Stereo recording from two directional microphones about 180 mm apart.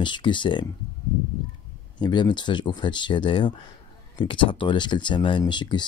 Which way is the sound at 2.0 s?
25° left (ahead or behind).